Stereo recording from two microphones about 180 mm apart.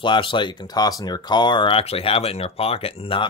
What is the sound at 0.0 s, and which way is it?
Speech, 25° left (ahead or behind).